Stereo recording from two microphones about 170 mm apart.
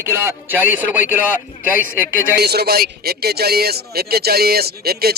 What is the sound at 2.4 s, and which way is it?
Speech, 70° right (ahead or behind).